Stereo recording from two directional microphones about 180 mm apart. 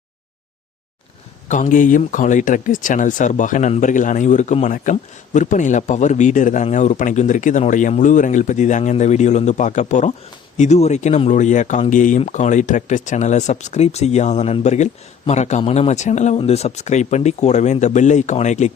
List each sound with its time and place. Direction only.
1.5 s speech: 45° left (ahead or behind)